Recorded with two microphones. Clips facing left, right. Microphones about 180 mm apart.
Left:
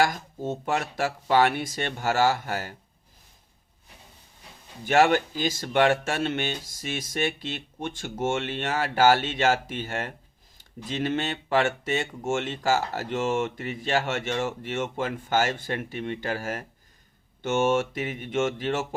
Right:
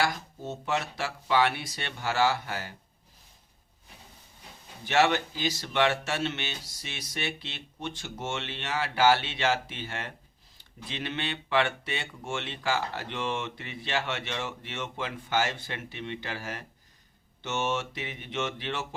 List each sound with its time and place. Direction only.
0.0 s speech: 50° left (ahead or behind)
4.9 s speech: 50° left (ahead or behind)